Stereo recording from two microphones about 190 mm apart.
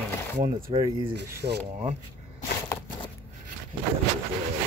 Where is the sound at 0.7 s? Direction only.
30° right (ahead or behind).